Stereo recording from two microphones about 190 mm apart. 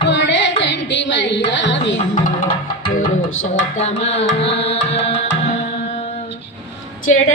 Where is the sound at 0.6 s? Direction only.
70° left (ahead or behind).